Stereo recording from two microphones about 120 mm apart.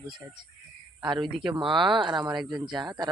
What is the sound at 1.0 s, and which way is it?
Speech, 40° right (ahead or behind).